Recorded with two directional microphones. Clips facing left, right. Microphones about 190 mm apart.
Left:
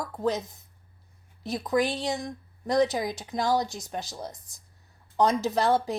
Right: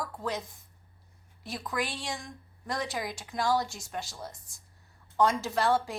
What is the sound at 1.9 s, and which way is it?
Speech, 20° left (ahead or behind).